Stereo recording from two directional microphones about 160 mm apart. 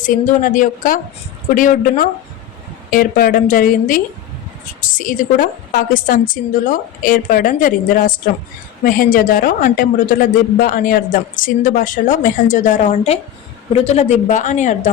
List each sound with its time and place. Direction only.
0.0 s speech: 55° left (ahead or behind)